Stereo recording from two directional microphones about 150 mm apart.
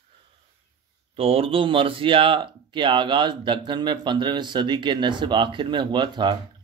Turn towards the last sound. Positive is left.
turn(degrees=-30)  # may be behind; listen again after turning